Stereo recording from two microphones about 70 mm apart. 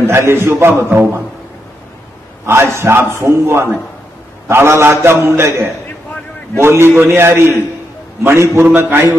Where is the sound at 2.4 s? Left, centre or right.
Right.